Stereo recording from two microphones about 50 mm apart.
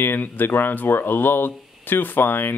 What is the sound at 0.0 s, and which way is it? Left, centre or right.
Speech, left.